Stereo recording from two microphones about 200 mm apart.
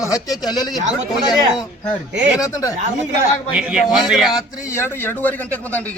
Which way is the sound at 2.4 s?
15° left (ahead or behind).